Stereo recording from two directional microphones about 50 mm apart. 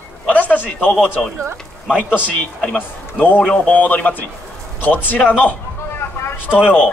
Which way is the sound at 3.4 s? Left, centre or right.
Left.